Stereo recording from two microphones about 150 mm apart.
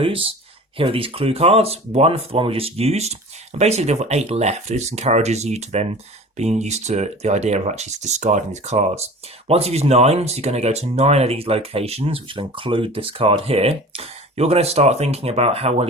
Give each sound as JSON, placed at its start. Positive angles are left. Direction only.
{"t": 0.0, "sound": "speech", "side_deg": -35}